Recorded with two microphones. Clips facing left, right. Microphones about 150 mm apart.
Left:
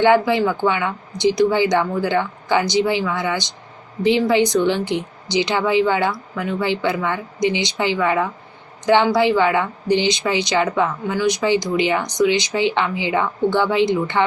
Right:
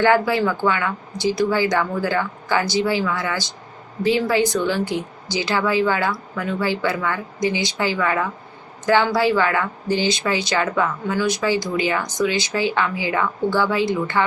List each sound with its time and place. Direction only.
0.0 s speech: 20° left (ahead or behind)